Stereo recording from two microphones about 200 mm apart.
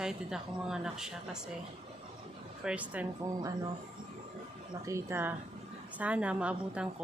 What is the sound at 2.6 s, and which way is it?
Speech, 5° right (ahead or behind).